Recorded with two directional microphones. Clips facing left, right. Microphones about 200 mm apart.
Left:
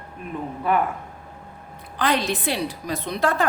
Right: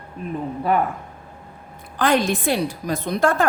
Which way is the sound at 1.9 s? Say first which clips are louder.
Right 4 dB; 45° right (ahead or behind).